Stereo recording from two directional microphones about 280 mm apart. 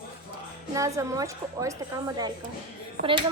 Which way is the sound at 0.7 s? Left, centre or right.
Centre.